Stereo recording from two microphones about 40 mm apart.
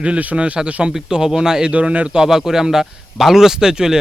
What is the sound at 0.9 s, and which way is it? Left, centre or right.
Speech, centre.